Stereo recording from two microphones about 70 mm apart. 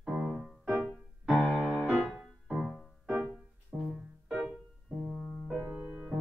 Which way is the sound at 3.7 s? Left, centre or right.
Centre.